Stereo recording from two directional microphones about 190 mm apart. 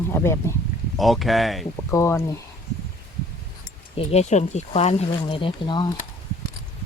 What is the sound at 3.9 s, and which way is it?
Speech, 30° left (ahead or behind).